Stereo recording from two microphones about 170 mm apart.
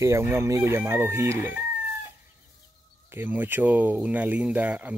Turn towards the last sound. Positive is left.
turn(degrees=-10)  # may be behind; listen again after turning